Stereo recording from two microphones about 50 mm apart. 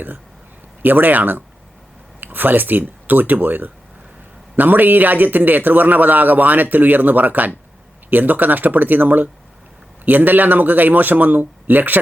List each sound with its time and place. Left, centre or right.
0.8 s a man's voice: right